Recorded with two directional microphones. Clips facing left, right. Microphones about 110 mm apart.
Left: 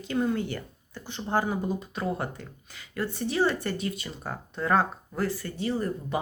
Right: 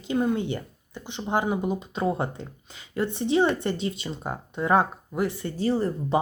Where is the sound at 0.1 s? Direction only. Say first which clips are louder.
Right 3 dB; 20° right (ahead or behind).